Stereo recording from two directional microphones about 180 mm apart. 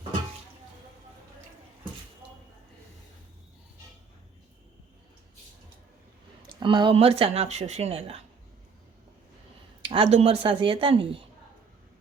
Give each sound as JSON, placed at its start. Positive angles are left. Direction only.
{"t": 6.6, "sound": "speech", "side_deg": -25}
{"t": 9.8, "sound": "speech", "side_deg": -35}